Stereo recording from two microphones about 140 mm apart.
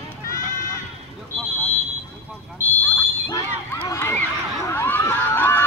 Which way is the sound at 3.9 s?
20° left (ahead or behind).